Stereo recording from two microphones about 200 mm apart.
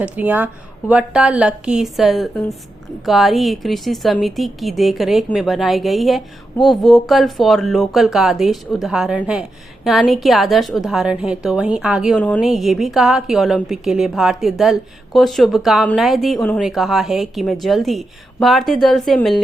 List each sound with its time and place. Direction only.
0.0 s a woman's voice: 10° right (ahead or behind)